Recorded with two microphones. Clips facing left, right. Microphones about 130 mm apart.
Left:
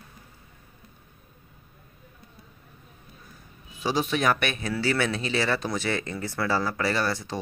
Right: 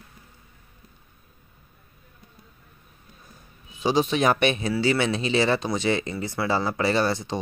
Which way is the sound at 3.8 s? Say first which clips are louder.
Right 4 dB; 25° right (ahead or behind).